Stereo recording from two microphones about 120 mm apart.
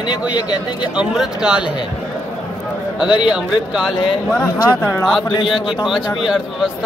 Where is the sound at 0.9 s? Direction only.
5° right (ahead or behind).